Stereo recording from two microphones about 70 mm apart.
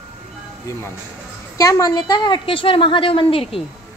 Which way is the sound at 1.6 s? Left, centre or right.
Left.